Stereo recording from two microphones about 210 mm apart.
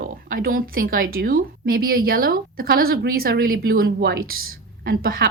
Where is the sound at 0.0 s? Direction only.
40° right (ahead or behind).